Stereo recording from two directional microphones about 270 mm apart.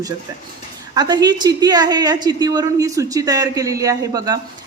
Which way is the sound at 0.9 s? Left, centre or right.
Centre.